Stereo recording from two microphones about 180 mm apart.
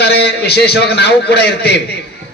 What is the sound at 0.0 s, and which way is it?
A man's voice, 65° left (ahead or behind).